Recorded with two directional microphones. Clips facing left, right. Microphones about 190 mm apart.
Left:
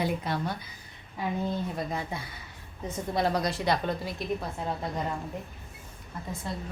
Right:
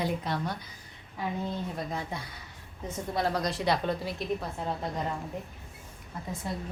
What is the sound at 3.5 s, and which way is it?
Speech, centre (ahead or behind).